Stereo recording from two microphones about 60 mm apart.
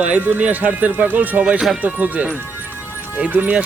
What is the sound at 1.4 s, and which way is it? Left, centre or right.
Speech, centre.